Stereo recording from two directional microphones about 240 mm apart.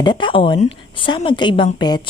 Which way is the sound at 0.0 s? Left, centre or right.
Centre.